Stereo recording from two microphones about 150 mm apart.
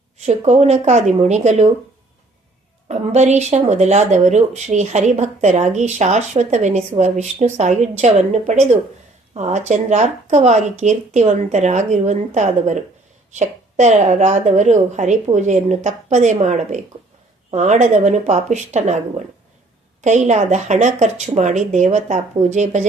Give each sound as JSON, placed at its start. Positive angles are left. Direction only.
{"t": 0.2, "sound": "speech", "side_deg": -50}
{"t": 2.9, "sound": "speech", "side_deg": -50}